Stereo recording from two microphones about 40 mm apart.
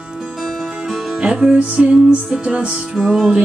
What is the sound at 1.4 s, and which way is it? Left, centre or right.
Music, right.